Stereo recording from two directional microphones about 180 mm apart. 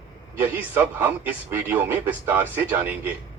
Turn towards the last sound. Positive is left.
turn(degrees=-10)  # may be behind; listen again after turning